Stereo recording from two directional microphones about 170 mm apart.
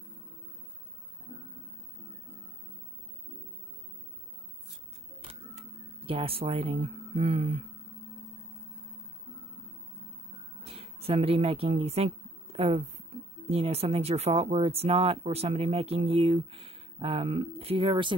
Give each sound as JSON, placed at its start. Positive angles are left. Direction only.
{"t": 5.2, "sound": "camera", "side_deg": -35}
{"t": 10.6, "sound": "speech", "side_deg": -35}